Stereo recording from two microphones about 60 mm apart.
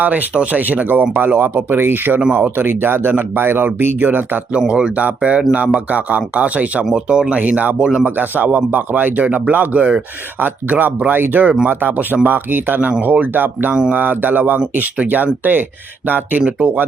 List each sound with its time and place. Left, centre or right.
0.0 s a man's voice: right
4.7 s a man's voice: centre